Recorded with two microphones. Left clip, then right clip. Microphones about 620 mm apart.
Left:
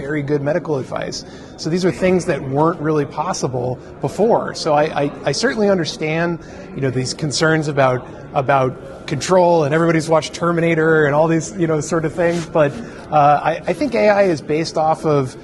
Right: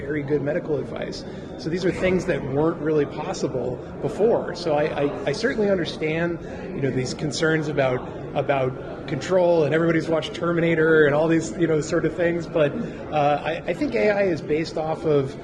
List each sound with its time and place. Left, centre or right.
0.1 s a man's voice: left